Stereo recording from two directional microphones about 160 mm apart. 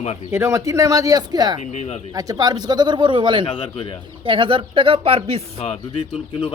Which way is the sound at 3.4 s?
30° left (ahead or behind).